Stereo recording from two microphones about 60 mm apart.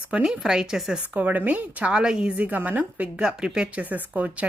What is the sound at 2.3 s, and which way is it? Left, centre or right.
A woman's voice, right.